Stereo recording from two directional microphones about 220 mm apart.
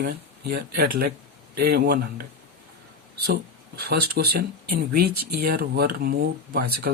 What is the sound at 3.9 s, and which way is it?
Speech, 45° right (ahead or behind).